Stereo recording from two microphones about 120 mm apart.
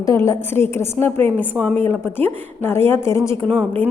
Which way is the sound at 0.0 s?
25° left (ahead or behind).